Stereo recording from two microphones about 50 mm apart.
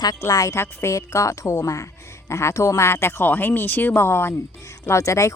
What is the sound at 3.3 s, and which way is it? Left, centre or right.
Speech, left.